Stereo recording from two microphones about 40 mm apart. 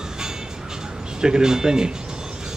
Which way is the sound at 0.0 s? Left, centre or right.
Centre.